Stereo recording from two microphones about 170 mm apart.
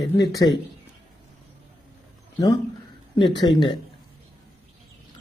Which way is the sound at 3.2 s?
25° left (ahead or behind).